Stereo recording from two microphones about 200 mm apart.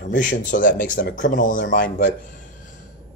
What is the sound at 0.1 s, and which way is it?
Speech, 40° left (ahead or behind).